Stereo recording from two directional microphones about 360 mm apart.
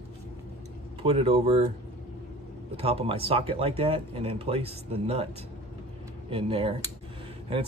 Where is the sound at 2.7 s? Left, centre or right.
Centre.